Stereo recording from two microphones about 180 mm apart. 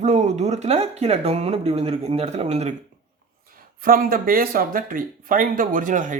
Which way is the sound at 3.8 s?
55° right (ahead or behind).